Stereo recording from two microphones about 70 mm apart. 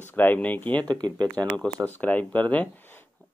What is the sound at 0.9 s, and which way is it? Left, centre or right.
Speech, right.